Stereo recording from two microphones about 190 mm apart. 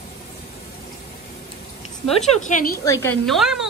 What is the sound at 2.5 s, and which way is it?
Speech, 50° left (ahead or behind).